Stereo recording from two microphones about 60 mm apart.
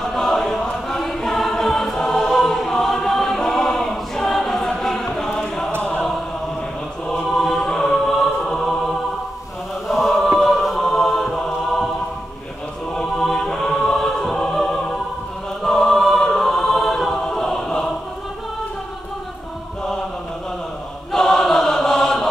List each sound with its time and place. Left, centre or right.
0.1 s choir: centre
5.8 s choir: left
7.1 s chant: centre
8.2 s choir: centre
9.8 s chant: centre
12.9 s music: centre
15.6 s choir: centre
21.1 s chant: centre